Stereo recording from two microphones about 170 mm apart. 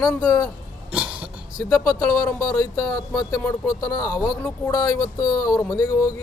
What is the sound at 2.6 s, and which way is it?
Speech, 20° left (ahead or behind).